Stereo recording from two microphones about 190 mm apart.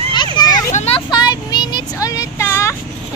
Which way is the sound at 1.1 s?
20° left (ahead or behind).